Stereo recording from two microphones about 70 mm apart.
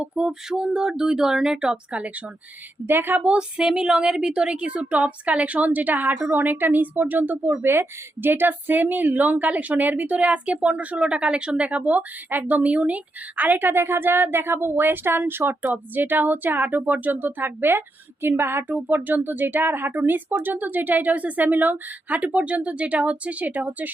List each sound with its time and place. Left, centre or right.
0.0 s a woman's voice: centre
2.8 s a woman's voice: right